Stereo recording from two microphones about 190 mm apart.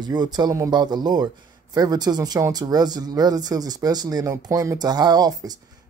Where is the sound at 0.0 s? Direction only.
20° right (ahead or behind).